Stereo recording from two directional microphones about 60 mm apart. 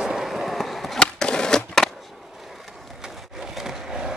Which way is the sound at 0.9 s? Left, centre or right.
Centre.